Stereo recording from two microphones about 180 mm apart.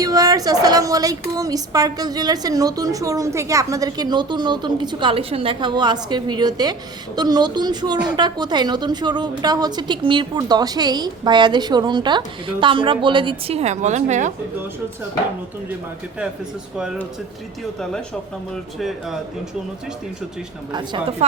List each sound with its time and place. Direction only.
0.0 s a woman's voice: 20° right (ahead or behind); by 14.3 s 40° right (ahead or behind)
18.5 s speech: centre (ahead or behind)
20.7 s a woman's voice: 25° right (ahead or behind)